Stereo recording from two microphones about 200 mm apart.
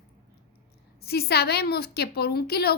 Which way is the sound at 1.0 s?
50° left (ahead or behind).